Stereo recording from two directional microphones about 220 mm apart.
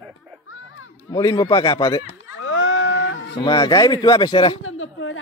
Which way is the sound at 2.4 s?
65° left (ahead or behind).